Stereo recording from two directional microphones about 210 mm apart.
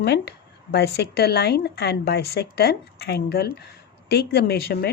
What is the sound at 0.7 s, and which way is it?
A woman's voice, 50° left (ahead or behind).